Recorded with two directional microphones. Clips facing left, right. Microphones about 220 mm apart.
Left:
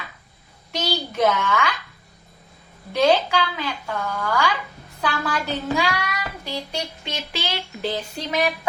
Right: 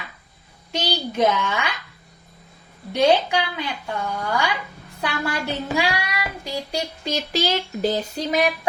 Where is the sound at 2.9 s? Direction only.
15° right (ahead or behind).